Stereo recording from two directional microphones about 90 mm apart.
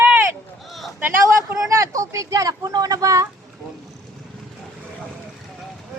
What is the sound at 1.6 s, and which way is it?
Speech, 40° right (ahead or behind).